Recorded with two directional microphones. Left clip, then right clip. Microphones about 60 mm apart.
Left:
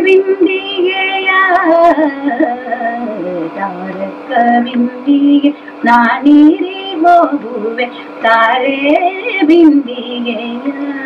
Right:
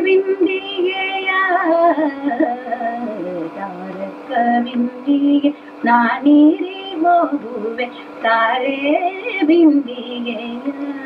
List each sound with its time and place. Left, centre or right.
0.0 s child singing: left
4.3 s female singing: left